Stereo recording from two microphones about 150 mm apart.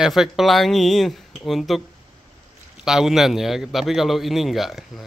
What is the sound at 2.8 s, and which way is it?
A man's voice, 5° right (ahead or behind).